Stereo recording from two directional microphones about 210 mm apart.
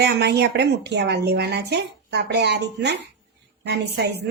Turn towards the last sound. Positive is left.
turn(degrees=-50)  # may be behind; listen again after turning